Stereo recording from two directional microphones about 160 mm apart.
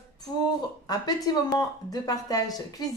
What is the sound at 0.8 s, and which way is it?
A woman's voice, 25° left (ahead or behind).